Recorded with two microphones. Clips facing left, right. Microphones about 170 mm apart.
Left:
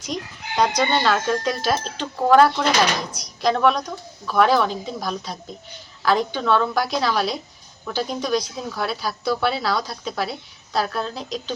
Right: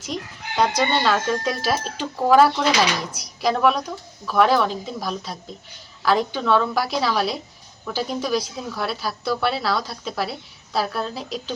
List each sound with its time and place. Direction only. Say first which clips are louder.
0.0 s speech: left 1 dB; 5° right (ahead or behind)